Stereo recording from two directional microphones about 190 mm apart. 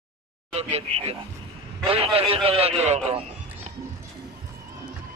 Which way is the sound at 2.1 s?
30° right (ahead or behind).